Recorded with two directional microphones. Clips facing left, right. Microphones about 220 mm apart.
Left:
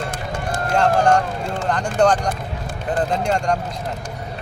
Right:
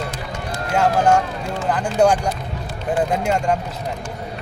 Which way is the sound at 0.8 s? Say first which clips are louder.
Even; 5° right (ahead or behind).